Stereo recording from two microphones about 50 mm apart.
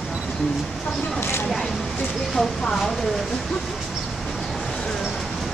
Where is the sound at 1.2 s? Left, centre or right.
Left.